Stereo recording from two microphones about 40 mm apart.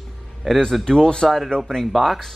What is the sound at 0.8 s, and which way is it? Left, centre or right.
Speech, centre.